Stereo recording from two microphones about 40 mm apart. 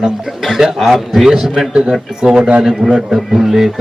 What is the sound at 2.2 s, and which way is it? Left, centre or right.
A man's voice, right.